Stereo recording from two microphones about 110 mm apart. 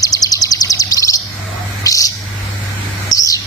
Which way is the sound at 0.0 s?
35° left (ahead or behind).